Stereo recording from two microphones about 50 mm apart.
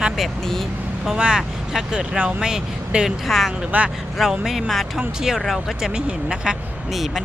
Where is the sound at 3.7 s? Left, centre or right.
Right.